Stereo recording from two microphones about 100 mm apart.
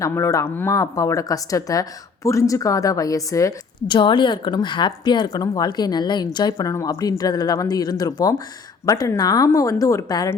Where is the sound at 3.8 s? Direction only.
55° left (ahead or behind).